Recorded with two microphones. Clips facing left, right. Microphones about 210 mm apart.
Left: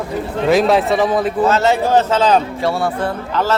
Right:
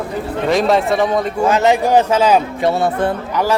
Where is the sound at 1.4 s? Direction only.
15° right (ahead or behind).